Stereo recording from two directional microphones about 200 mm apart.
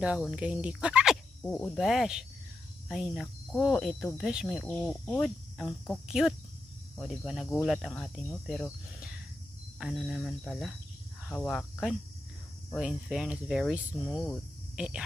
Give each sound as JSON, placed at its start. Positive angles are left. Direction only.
{"t": 0.0, "sound": "speech", "side_deg": -5}
{"t": 1.4, "sound": "speech", "side_deg": 5}
{"t": 9.8, "sound": "speech", "side_deg": -5}